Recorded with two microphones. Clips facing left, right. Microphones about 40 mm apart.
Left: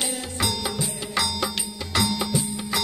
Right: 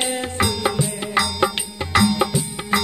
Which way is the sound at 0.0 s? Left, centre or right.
Right.